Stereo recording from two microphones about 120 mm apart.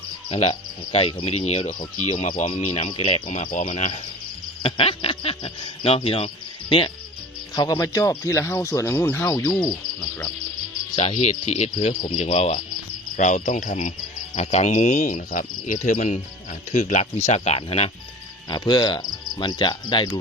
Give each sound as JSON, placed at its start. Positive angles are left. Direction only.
{"t": 0.3, "sound": "speech", "side_deg": 65}
{"t": 0.9, "sound": "speech", "side_deg": 50}
{"t": 2.5, "sound": "speech", "side_deg": 65}
{"t": 2.9, "sound": "speech", "side_deg": 50}
{"t": 3.4, "sound": "cricket", "side_deg": 85}
{"t": 4.6, "sound": "speech", "side_deg": 50}
{"t": 7.5, "sound": "speech", "side_deg": 30}
{"t": 10.9, "sound": "speech", "side_deg": 65}
{"t": 13.1, "sound": "cricket", "side_deg": 85}
{"t": 14.3, "sound": "speech", "side_deg": 70}
{"t": 15.6, "sound": "cricket", "side_deg": 90}
{"t": 16.7, "sound": "speech", "side_deg": 70}
{"t": 18.4, "sound": "cricket", "side_deg": 35}